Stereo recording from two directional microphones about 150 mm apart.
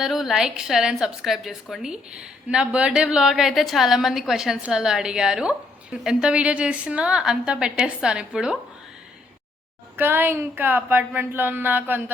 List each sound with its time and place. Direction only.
0.0 s a woman's voice: centre (ahead or behind)
10.0 s speech: 15° right (ahead or behind)